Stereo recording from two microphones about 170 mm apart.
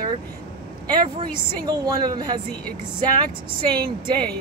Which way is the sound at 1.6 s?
25° right (ahead or behind).